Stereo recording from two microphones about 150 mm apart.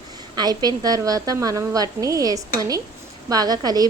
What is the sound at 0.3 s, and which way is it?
A woman's voice, 25° right (ahead or behind).